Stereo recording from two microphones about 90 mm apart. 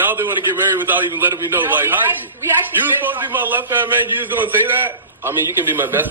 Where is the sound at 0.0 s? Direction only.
20° right (ahead or behind).